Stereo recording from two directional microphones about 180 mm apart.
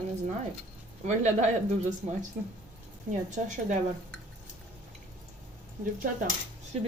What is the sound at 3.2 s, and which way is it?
Speech, 45° right (ahead or behind).